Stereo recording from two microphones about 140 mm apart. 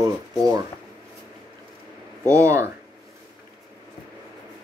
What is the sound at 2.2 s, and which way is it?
Speech, 20° right (ahead or behind).